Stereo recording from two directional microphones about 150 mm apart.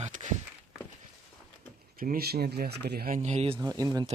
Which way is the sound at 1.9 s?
70° right (ahead or behind).